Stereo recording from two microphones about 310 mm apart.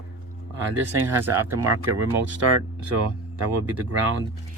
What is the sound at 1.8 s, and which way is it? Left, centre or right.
Speech, right.